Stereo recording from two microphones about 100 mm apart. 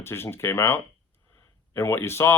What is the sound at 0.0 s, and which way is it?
Speech, 25° left (ahead or behind).